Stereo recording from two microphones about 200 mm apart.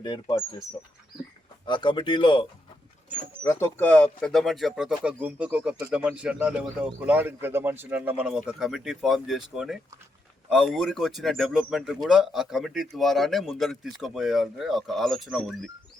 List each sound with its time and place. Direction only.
0.0 s speech: 20° left (ahead or behind)
1.6 s speech: 25° left (ahead or behind)
3.4 s a man's voice: 15° left (ahead or behind)